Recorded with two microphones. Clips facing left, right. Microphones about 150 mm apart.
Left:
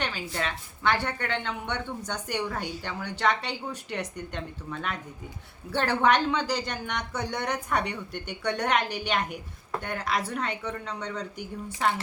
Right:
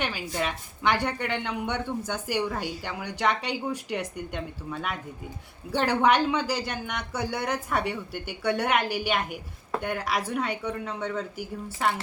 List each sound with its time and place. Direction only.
0.0 s a woman's voice: 10° right (ahead or behind)